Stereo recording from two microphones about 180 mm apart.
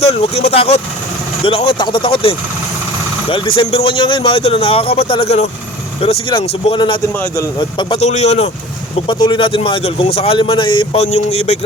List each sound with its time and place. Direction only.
0.0 s a man's voice: 35° left (ahead or behind)
7.1 s a man's voice: 10° left (ahead or behind)
7.8 s speech: 30° left (ahead or behind)
9.0 s a man's voice: 25° left (ahead or behind)